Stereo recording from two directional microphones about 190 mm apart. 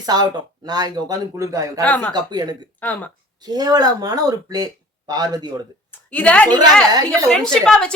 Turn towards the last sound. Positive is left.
turn(degrees=5)  # may be behind; listen again after turning